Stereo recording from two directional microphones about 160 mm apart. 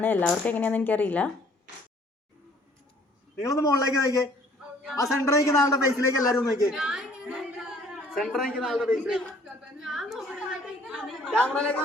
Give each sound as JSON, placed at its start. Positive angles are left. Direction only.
{"t": 0.0, "sound": "speech", "side_deg": 10}
{"t": 3.4, "sound": "a man's voice", "side_deg": 20}
{"t": 6.7, "sound": "a sound", "side_deg": -5}
{"t": 8.1, "sound": "a man's voice", "side_deg": 0}
{"t": 9.8, "sound": "a sound", "side_deg": 0}
{"t": 11.3, "sound": "speech", "side_deg": 5}